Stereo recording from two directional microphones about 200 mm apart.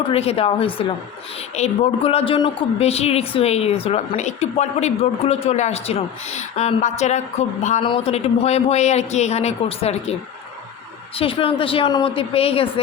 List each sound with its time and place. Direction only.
0.1 s a woman's voice: 30° left (ahead or behind)
11.2 s a woman's voice: 25° left (ahead or behind)